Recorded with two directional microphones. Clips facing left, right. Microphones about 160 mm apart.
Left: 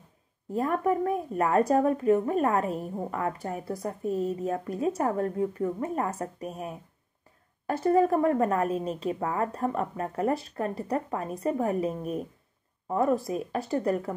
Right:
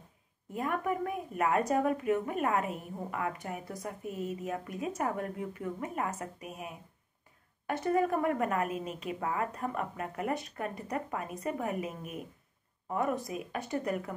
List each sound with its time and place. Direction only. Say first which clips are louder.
0.5 s speech: left 7 dB; 35° left (ahead or behind)